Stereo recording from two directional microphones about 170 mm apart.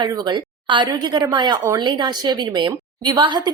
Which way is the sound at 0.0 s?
25° right (ahead or behind).